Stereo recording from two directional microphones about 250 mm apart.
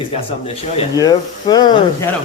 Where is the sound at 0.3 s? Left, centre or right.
Left.